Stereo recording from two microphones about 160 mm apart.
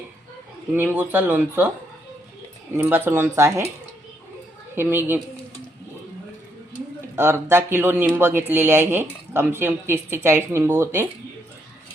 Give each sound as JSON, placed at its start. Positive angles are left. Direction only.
{"t": 0.7, "sound": "speech", "side_deg": -10}
{"t": 2.7, "sound": "speech", "side_deg": -15}
{"t": 4.7, "sound": "speech", "side_deg": -15}
{"t": 7.2, "sound": "speech", "side_deg": -15}